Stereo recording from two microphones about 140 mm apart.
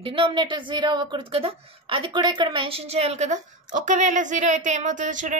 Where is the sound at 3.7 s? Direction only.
65° right (ahead or behind).